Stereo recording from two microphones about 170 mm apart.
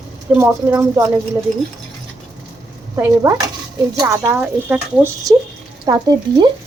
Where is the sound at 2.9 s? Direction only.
15° right (ahead or behind).